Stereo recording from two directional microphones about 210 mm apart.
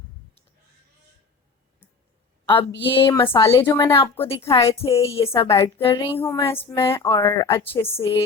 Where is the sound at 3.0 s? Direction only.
10° left (ahead or behind).